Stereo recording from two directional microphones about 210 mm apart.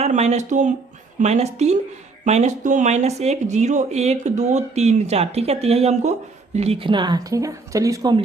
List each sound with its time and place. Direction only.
0.0 s a woman's voice: 30° right (ahead or behind)